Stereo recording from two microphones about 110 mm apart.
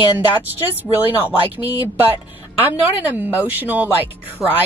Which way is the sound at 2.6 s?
15° right (ahead or behind).